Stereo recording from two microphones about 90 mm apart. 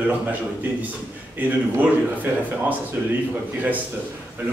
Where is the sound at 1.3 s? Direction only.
20° right (ahead or behind).